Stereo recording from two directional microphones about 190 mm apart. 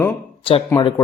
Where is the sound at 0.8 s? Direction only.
25° left (ahead or behind).